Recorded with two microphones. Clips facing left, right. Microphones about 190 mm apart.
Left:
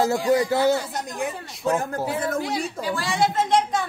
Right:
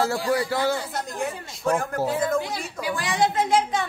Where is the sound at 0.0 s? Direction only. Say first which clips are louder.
Left 3 dB; 20° left (ahead or behind).